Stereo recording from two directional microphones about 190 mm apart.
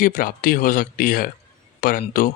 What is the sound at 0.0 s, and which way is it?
Speech, 45° left (ahead or behind).